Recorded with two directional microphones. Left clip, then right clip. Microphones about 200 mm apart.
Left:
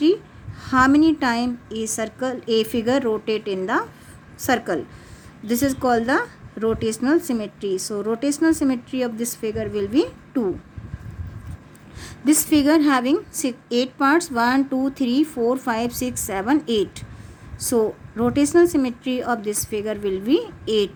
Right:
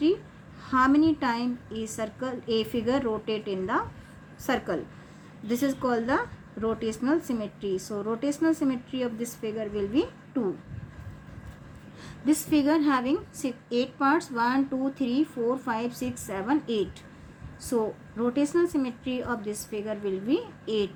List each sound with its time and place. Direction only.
0.6 s a woman's voice: 55° left (ahead or behind)
11.9 s a woman's voice: 55° left (ahead or behind)